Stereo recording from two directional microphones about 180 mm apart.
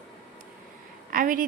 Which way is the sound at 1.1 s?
50° right (ahead or behind).